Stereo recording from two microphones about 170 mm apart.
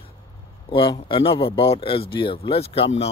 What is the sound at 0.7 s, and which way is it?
Speech, 30° left (ahead or behind).